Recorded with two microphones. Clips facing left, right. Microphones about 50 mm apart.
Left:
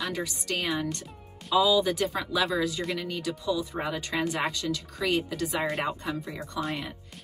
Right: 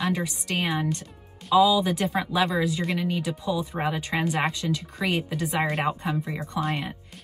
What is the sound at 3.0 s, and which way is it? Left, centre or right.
Speech, right.